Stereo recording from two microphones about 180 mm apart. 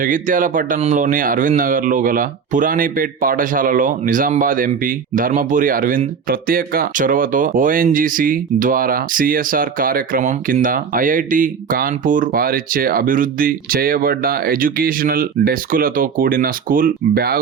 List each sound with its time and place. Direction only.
0.0 s speech: 50° right (ahead or behind)